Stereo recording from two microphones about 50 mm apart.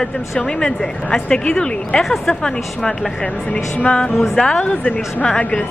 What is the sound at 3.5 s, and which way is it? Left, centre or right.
Speech, left.